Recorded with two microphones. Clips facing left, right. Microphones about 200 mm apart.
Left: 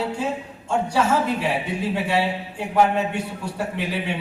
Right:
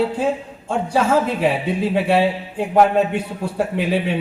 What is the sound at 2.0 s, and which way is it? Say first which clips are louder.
A man's voice: right 6 dB; 55° right (ahead or behind).